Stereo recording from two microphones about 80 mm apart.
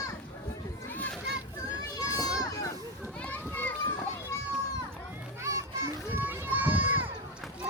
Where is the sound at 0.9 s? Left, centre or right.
Centre.